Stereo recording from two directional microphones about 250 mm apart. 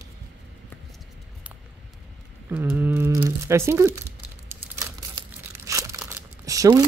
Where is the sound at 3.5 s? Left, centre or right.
Centre.